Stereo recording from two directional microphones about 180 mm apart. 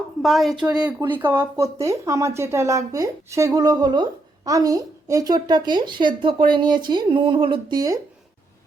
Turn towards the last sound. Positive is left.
turn(degrees=-20)  # may be behind; listen again after turning